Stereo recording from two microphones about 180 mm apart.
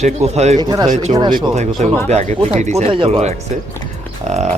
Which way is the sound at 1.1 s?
40° right (ahead or behind).